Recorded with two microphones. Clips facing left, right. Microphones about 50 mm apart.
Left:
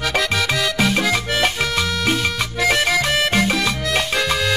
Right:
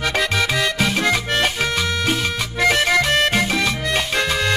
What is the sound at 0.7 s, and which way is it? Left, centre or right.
Music, centre.